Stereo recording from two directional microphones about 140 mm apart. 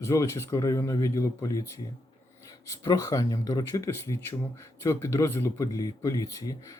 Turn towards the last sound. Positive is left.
turn(degrees=25)  # may be behind; listen again after turning